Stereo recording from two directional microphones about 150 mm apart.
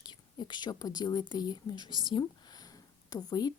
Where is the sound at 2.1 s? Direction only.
30° left (ahead or behind).